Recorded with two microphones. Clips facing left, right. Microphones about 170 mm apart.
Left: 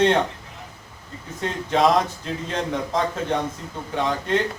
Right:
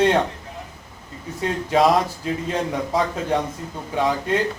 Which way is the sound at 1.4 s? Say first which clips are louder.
Right 2 dB; 5° right (ahead or behind).